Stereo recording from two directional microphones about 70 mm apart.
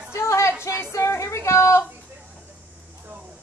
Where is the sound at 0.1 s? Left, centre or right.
Left.